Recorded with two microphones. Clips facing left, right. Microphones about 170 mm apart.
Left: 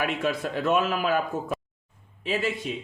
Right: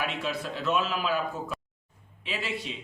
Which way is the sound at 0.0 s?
50° left (ahead or behind).